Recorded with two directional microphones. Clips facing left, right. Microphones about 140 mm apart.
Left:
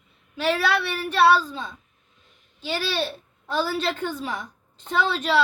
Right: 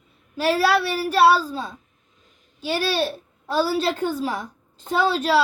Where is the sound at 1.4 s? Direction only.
35° right (ahead or behind).